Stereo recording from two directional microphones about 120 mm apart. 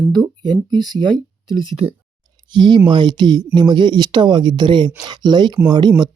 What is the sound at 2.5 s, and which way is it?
Speech, 40° right (ahead or behind).